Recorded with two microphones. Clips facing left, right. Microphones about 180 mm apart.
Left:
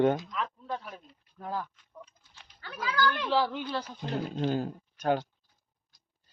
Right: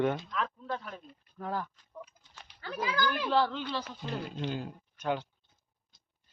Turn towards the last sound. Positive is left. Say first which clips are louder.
# left 5 dB
turn(degrees=40)  # may be behind; listen again after turning